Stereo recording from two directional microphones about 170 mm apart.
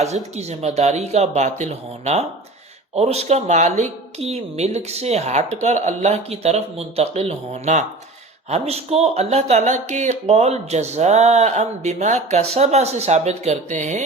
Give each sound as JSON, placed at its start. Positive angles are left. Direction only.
{"t": 0.3, "sound": "speech", "side_deg": -40}